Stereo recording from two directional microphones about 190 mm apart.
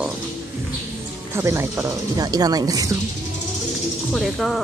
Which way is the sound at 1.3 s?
15° right (ahead or behind).